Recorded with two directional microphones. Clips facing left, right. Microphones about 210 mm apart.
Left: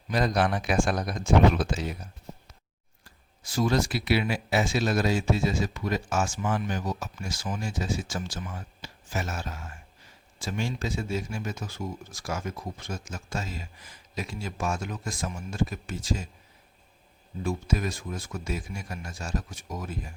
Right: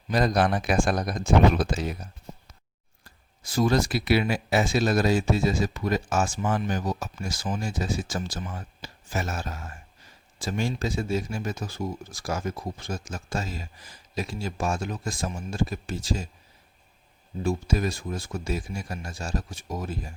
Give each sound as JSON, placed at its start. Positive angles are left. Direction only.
{"t": 0.1, "sound": "speech", "side_deg": -40}
{"t": 3.0, "sound": "speech", "side_deg": -40}
{"t": 17.4, "sound": "speech", "side_deg": -30}